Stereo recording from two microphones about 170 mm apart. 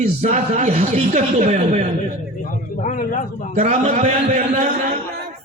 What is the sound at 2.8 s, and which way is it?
Speech, 50° left (ahead or behind).